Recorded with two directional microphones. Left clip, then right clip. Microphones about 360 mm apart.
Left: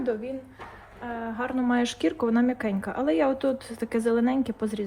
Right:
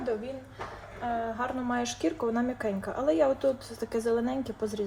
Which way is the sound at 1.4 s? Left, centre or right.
Centre.